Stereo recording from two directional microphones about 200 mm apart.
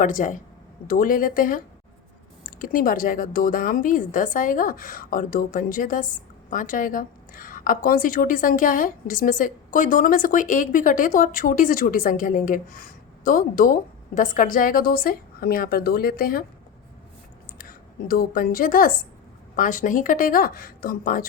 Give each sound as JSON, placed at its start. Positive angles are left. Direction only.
{"t": 0.0, "sound": "a woman's voice", "side_deg": 40}
{"t": 17.6, "sound": "a woman's voice", "side_deg": 50}